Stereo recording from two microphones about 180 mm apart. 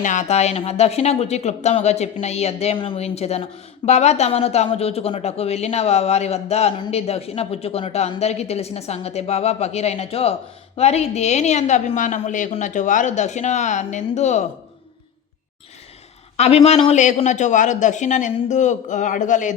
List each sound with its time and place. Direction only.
0.0 s a woman's voice: 45° left (ahead or behind)
16.4 s a woman's voice: 35° left (ahead or behind)